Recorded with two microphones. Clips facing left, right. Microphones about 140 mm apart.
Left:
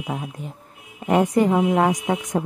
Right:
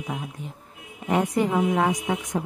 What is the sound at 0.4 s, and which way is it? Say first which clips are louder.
A woman's voice: left 2 dB; 45° left (ahead or behind).